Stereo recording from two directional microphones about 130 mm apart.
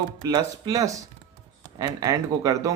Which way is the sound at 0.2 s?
30° right (ahead or behind).